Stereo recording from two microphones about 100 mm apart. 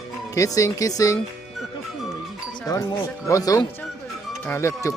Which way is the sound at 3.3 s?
35° left (ahead or behind).